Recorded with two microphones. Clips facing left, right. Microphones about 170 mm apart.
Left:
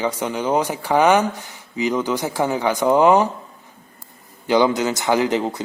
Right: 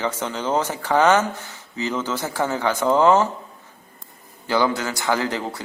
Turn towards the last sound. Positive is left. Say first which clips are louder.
# left 5 dB
turn(degrees=20)  # may be behind; listen again after turning